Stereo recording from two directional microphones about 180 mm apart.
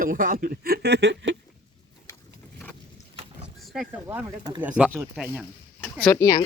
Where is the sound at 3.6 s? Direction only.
5° right (ahead or behind).